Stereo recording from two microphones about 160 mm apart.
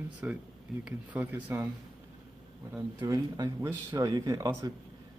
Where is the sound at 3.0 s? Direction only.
25° right (ahead or behind).